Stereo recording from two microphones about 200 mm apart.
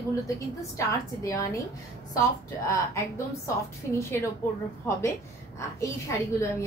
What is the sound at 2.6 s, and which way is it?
Speech, 15° left (ahead or behind).